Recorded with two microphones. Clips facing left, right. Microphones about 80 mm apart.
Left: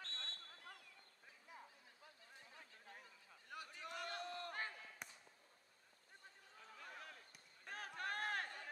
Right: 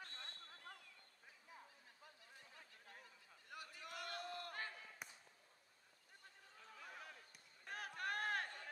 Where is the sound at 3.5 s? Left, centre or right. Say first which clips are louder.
Left 2 dB; left.